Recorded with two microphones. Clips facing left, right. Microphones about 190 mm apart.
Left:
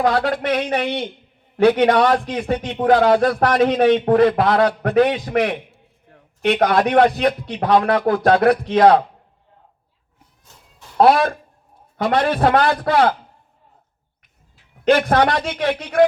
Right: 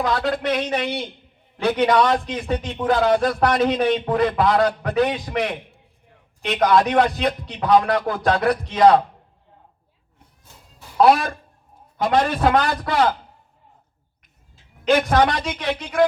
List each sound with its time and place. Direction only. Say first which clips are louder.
0.0 s a man's voice: left 3 dB; 55° left (ahead or behind)
10.9 s a man's voice: left 2 dB; 60° left (ahead or behind)
14.8 s a man's voice: left 2 dB; 55° left (ahead or behind)